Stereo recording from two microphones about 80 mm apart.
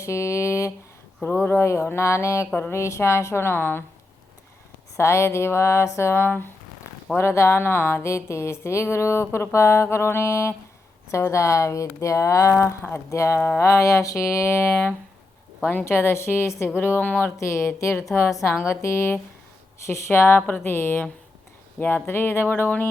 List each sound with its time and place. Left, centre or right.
0.0 s speech: left
1.2 s speech: left
4.9 s speech: left
15.7 s speech: left
17.3 s speech: left